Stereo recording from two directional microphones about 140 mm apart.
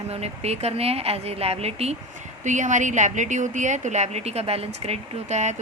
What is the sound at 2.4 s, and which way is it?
A woman's voice, 60° right (ahead or behind).